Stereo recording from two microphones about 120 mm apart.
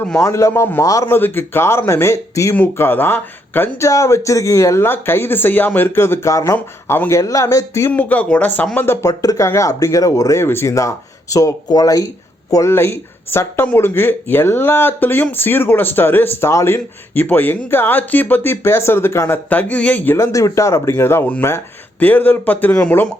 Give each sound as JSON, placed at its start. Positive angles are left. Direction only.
{"t": 0.2, "sound": "speech", "side_deg": 25}